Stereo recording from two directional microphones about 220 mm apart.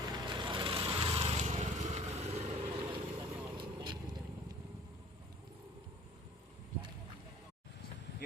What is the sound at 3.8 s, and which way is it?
Vehicle, 20° right (ahead or behind).